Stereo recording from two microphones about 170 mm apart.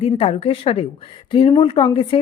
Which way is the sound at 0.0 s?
35° left (ahead or behind).